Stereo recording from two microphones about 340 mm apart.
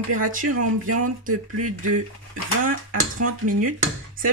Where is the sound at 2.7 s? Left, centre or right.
Right.